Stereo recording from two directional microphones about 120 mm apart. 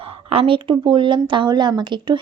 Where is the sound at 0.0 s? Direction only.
50° right (ahead or behind).